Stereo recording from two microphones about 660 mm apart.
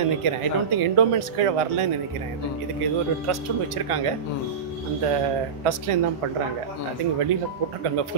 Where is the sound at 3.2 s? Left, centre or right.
Right.